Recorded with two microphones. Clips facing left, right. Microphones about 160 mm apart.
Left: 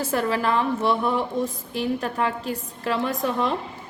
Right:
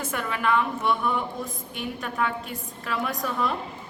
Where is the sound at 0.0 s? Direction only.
35° left (ahead or behind).